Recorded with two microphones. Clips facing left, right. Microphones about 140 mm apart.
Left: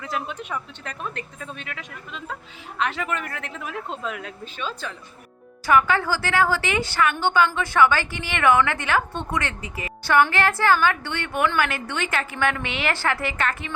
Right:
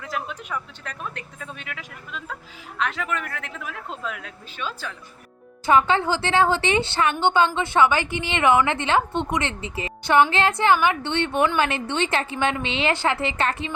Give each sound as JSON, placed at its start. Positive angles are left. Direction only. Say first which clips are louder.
{"t": 0.1, "sound": "speech", "louder": "left 1 dB", "side_deg": 0}
{"t": 5.6, "sound": "a woman's voice", "louder": "right 1 dB", "side_deg": -25}